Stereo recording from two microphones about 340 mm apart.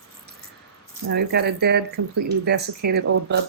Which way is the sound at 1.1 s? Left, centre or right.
Right.